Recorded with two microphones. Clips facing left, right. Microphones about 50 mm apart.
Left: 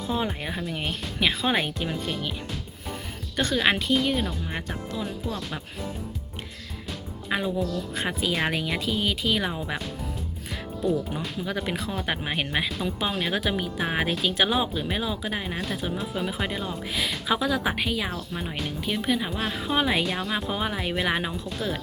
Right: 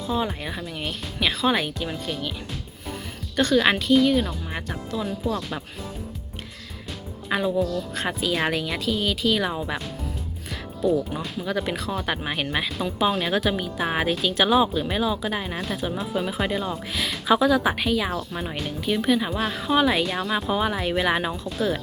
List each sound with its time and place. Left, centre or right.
0.7 s speech: left
3.4 s a woman's voice: centre
7.3 s a woman's voice: centre
9.5 s speech: centre
10.8 s a woman's voice: centre
20.1 s speech: centre